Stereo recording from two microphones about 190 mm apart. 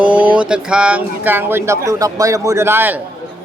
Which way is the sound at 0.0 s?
10° right (ahead or behind).